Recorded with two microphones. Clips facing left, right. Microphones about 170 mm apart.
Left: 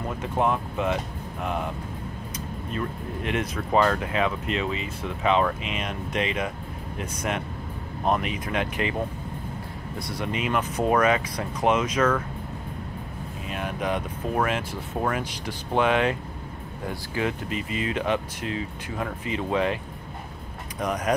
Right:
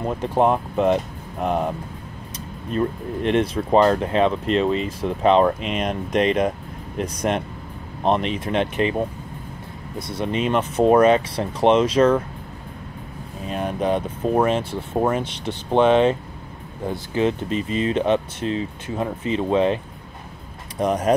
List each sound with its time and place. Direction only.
0.2 s speech: 35° right (ahead or behind)
3.3 s speech: 30° right (ahead or behind)
9.9 s speech: 20° right (ahead or behind)
13.5 s speech: 35° right (ahead or behind)
20.8 s speech: 30° right (ahead or behind)